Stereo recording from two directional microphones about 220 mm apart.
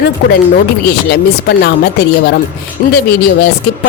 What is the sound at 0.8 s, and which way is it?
Speech, 50° left (ahead or behind).